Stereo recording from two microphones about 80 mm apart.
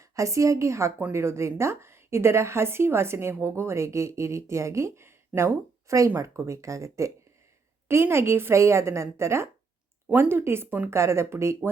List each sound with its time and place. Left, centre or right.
0.0 s a woman's voice: right
8.1 s a woman's voice: right